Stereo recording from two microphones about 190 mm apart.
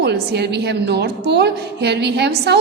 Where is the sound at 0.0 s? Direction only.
60° right (ahead or behind).